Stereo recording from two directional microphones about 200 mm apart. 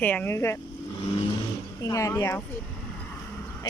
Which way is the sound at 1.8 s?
15° left (ahead or behind).